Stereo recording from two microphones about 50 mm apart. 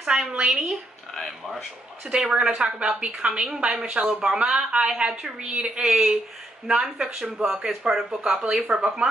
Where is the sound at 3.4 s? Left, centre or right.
Centre.